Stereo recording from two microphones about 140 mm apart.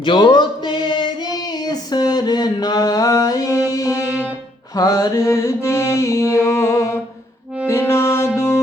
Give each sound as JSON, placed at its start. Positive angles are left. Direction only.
{"t": 0.0, "sound": "a sound", "side_deg": 35}
{"t": 3.7, "sound": "music", "side_deg": 25}
{"t": 4.7, "sound": "mantra", "side_deg": 25}
{"t": 7.7, "sound": "music", "side_deg": 20}